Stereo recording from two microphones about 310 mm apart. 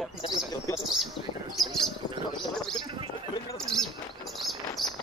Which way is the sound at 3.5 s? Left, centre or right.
Centre.